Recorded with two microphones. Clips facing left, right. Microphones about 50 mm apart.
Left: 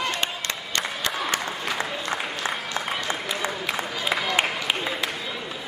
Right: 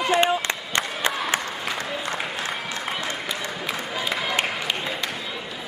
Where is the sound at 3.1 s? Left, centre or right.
Centre.